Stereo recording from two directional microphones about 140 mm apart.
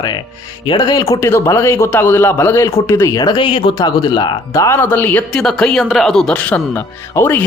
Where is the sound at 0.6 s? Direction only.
30° left (ahead or behind).